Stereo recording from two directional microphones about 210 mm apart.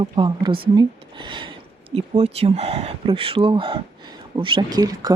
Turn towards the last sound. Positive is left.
turn(degrees=-20)  # may be behind; listen again after turning